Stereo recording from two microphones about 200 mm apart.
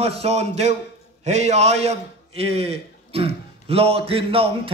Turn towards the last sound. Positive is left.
turn(degrees=-30)  # may be behind; listen again after turning